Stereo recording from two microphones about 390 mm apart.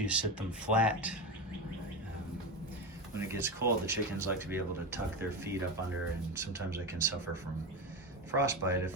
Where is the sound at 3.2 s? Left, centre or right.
Centre.